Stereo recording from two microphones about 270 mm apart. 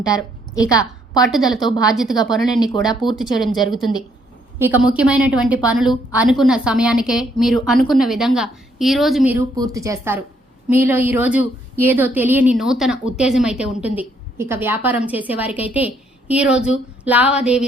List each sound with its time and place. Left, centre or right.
0.0 s a woman's voice: centre
1.2 s a woman's voice: centre
1.5 s a woman's voice: centre
3.0 s a woman's voice: centre
4.5 s a woman's voice: centre